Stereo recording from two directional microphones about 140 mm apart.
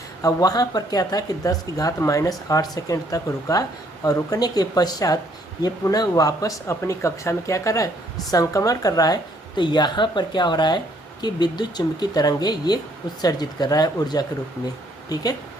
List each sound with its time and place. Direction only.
0.2 s speech: 25° left (ahead or behind)